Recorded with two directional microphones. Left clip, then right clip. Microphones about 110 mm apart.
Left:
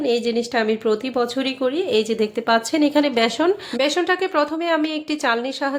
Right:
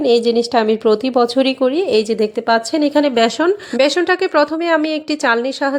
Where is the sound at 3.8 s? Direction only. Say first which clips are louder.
Right 7 dB; 55° right (ahead or behind).